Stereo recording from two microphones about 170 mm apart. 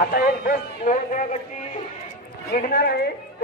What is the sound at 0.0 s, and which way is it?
A man's voice, 60° left (ahead or behind).